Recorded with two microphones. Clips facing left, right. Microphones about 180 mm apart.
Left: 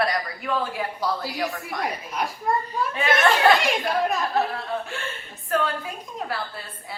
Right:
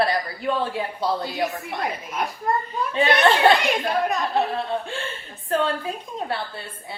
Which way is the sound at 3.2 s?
30° right (ahead or behind).